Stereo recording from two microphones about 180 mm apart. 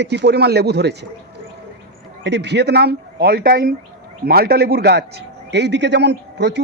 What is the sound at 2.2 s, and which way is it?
A man's voice, 70° right (ahead or behind).